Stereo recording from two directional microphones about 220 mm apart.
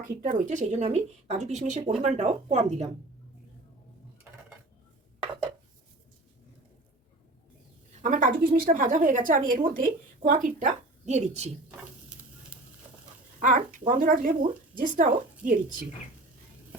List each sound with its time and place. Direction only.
0.2 s a woman's voice: 35° right (ahead or behind)
8.0 s a woman's voice: 35° right (ahead or behind)
13.4 s a woman's voice: 35° right (ahead or behind)